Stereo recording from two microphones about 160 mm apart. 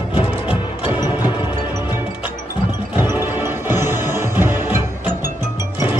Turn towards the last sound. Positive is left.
turn(degrees=-10)  # may be behind; listen again after turning